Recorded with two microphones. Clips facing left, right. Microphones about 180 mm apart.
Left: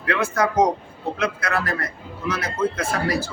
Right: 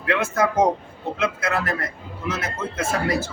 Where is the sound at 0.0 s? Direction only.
25° right (ahead or behind).